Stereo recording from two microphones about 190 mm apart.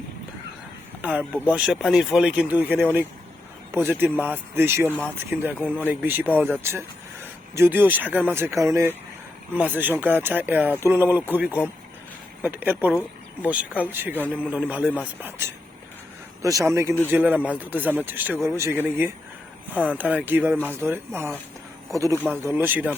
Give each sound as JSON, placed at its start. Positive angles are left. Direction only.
{"t": 1.5, "sound": "speech", "side_deg": -5}
{"t": 4.9, "sound": "speech", "side_deg": 10}
{"t": 5.3, "sound": "speech", "side_deg": -10}
{"t": 12.9, "sound": "speech", "side_deg": 10}
{"t": 13.8, "sound": "speech", "side_deg": -10}
{"t": 19.7, "sound": "speech", "side_deg": 10}
{"t": 20.0, "sound": "speech", "side_deg": -10}